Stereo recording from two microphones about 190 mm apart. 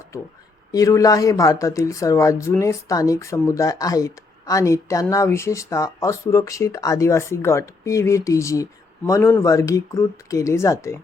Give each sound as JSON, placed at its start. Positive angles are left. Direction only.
{"t": 0.7, "sound": "speech", "side_deg": 15}